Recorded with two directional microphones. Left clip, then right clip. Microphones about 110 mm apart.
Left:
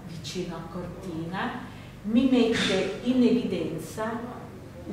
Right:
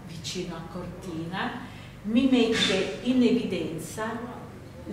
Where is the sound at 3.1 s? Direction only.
5° right (ahead or behind).